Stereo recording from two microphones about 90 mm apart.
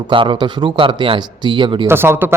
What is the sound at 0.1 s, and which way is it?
Speech, 65° right (ahead or behind).